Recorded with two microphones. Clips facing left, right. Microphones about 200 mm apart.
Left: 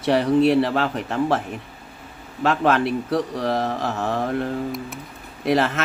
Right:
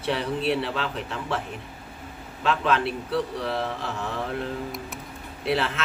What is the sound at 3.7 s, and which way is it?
Mantra, 70° left (ahead or behind).